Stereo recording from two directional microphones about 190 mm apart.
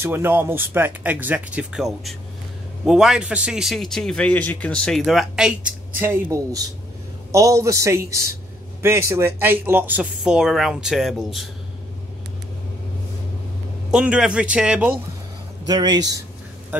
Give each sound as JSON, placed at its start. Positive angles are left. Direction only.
{"t": 0.0, "sound": "a man's voice", "side_deg": -10}
{"t": 13.8, "sound": "a man's voice", "side_deg": -5}
{"t": 15.6, "sound": "speech", "side_deg": -20}